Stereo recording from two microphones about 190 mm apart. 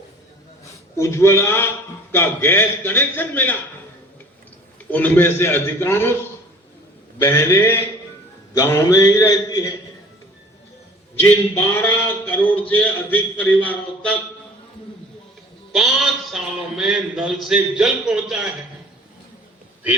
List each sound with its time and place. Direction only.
0.6 s a man's voice: 15° left (ahead or behind)
4.9 s a man's voice: 10° left (ahead or behind)
7.2 s a man's voice: 10° left (ahead or behind)
11.2 s a man's voice: 10° left (ahead or behind)
15.7 s a man's voice: centre (ahead or behind)